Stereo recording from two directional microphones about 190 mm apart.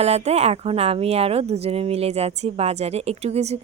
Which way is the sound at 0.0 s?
35° right (ahead or behind).